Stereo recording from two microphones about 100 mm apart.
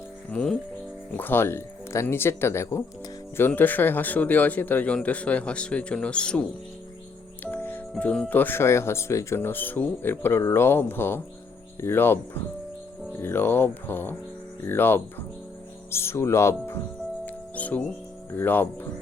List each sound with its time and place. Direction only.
0.3 s a man's voice: 10° left (ahead or behind)
7.5 s speech: 20° left (ahead or behind)
17.2 s music: 15° left (ahead or behind)
18.3 s speech: 20° left (ahead or behind)